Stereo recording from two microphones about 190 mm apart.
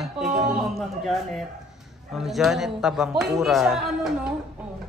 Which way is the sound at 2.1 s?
Centre (ahead or behind).